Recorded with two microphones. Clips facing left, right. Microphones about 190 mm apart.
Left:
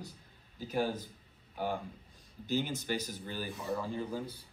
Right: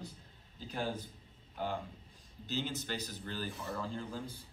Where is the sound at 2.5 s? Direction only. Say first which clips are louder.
Left 5 dB; 15° left (ahead or behind).